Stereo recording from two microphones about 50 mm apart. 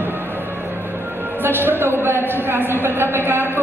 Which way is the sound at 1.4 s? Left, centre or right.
Right.